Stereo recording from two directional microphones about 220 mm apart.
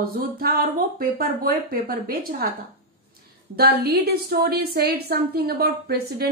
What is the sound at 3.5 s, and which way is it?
A woman's voice, 45° right (ahead or behind).